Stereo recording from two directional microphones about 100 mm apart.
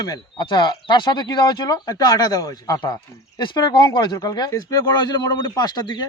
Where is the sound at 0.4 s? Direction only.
50° left (ahead or behind).